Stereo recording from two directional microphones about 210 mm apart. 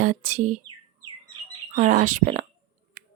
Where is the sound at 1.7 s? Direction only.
35° right (ahead or behind).